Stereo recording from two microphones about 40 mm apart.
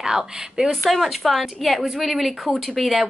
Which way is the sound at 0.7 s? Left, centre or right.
Centre.